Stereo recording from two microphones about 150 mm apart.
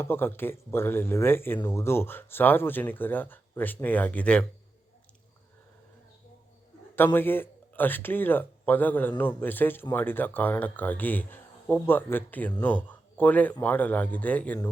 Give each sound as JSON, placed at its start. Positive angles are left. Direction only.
{"t": 0.0, "sound": "a man's voice", "side_deg": 15}
{"t": 6.9, "sound": "a man's voice", "side_deg": 15}